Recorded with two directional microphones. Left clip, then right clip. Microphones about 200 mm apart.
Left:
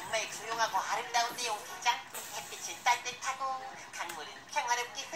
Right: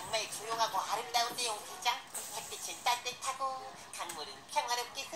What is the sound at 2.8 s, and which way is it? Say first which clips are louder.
Music: left 3 dB; 35° right (ahead or behind).